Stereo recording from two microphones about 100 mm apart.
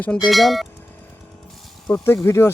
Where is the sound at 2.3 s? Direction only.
25° left (ahead or behind).